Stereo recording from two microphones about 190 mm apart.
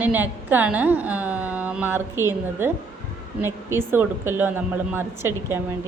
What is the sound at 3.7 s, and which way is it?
A woman's voice, 10° right (ahead or behind).